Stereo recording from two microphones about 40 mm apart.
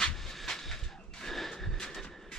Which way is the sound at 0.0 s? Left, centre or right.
Centre.